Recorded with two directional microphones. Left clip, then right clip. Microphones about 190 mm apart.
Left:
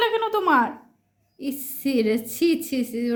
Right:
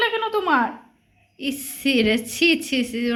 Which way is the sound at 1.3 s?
5° left (ahead or behind).